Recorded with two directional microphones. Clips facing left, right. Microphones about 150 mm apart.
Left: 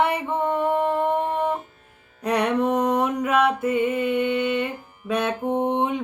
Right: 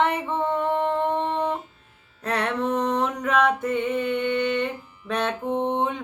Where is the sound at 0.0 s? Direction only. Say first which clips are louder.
Left 1 dB; 10° left (ahead or behind).